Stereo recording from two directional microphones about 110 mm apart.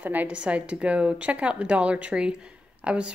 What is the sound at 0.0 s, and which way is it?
A woman's voice, 15° right (ahead or behind).